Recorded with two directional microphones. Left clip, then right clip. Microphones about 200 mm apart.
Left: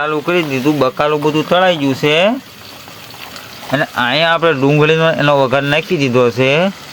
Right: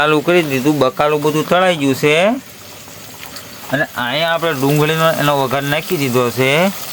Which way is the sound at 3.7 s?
20° left (ahead or behind).